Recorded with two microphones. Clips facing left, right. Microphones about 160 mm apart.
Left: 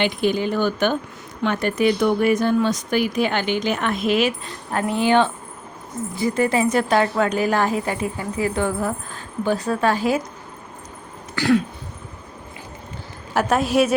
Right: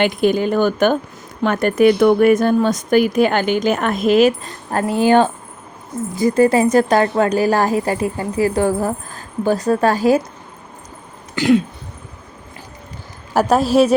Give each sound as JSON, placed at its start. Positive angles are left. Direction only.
{"t": 0.0, "sound": "a woman's voice", "side_deg": -50}
{"t": 11.3, "sound": "throat clearing", "side_deg": -20}
{"t": 13.3, "sound": "a woman's voice", "side_deg": -35}